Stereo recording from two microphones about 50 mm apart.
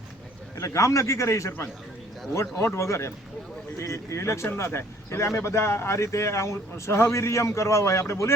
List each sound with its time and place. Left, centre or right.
0.5 s a man's voice: left
4.5 s speech: left